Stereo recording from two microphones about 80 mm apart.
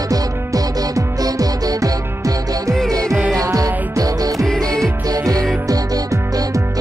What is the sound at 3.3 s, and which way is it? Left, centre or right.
Music, right.